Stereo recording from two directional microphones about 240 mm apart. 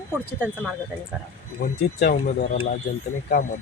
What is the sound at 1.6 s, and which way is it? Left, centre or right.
Speech, left.